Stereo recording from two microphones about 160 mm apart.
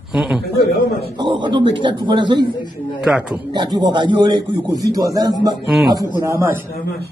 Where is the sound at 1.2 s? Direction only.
30° right (ahead or behind).